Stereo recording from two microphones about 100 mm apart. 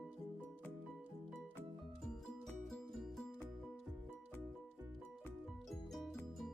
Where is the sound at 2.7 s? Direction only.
5° left (ahead or behind).